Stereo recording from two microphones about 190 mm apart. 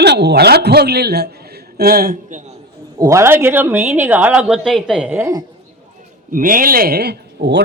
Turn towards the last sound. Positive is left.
turn(degrees=-60)  # may be behind; listen again after turning